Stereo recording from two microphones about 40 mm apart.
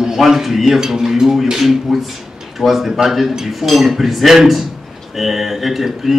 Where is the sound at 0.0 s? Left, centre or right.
Centre.